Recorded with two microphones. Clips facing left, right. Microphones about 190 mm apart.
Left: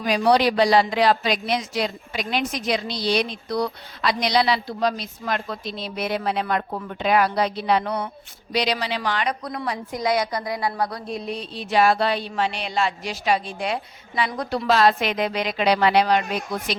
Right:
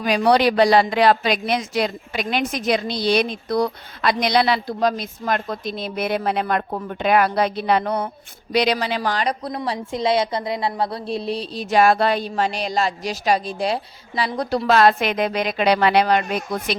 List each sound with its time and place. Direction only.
0.0 s speech: 60° right (ahead or behind); by 8.1 s 40° right (ahead or behind)
8.5 s a woman's voice: 55° right (ahead or behind); by 14.7 s 35° right (ahead or behind)
14.7 s speech: 55° right (ahead or behind)